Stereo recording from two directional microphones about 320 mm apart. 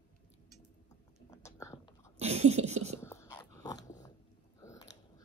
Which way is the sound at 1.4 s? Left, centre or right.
Centre.